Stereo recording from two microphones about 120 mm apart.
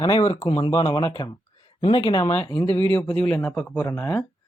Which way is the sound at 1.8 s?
45° left (ahead or behind).